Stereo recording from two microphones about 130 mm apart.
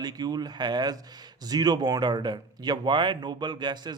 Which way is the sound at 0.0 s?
30° right (ahead or behind).